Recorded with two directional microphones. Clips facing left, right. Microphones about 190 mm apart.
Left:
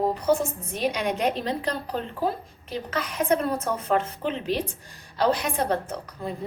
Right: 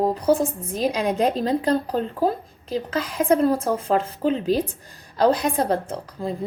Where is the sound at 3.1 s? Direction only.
30° right (ahead or behind).